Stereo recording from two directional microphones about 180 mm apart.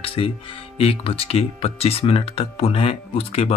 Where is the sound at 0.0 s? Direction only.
30° left (ahead or behind).